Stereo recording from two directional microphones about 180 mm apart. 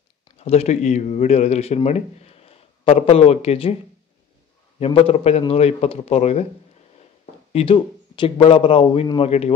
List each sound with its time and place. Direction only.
0.4 s speech: 35° left (ahead or behind)
4.7 s a man's voice: 30° left (ahead or behind)
7.5 s a man's voice: 30° left (ahead or behind)